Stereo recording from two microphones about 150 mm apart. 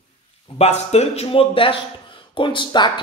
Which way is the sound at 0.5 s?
45° left (ahead or behind).